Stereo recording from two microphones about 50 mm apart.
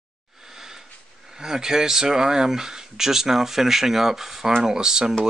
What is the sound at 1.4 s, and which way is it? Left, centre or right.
Speech, centre.